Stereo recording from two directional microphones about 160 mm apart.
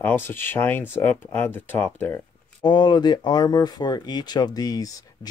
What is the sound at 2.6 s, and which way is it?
Speech, 30° left (ahead or behind).